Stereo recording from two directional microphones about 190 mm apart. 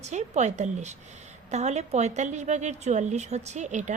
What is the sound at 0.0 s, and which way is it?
A woman's voice, 35° right (ahead or behind).